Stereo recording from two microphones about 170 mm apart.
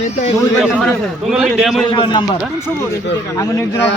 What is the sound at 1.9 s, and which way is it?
Speech, 25° left (ahead or behind).